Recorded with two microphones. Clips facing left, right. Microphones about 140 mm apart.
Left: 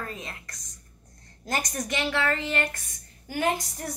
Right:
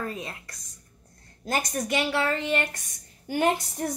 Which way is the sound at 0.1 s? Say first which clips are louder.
Right 3 dB; 10° right (ahead or behind).